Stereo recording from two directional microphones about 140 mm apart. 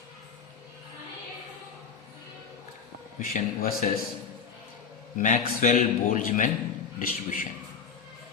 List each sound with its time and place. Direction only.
3.2 s speech: 90° left
5.1 s a man's voice: 70° left (ahead or behind)
7.0 s speech: 90° left